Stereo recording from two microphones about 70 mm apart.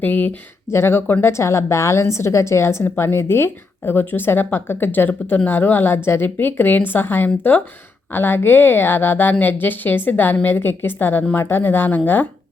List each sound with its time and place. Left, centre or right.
0.0 s speech: left
0.7 s speech: left
1.3 s a woman's voice: left